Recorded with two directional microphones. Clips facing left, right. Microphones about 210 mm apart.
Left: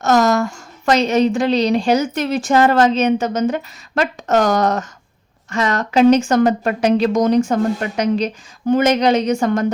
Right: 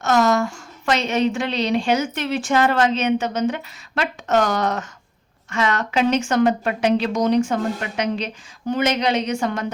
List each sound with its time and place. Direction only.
0.0 s a woman's voice: 40° left (ahead or behind)